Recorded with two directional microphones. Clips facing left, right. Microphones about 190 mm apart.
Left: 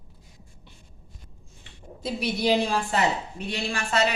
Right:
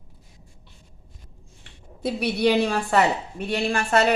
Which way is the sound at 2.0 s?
65° right (ahead or behind).